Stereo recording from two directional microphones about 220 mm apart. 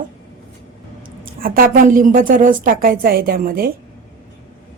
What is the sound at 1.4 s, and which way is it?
A woman's voice, 40° right (ahead or behind).